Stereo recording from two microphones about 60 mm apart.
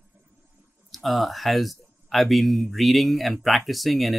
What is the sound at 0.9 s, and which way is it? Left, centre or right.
Speech, centre.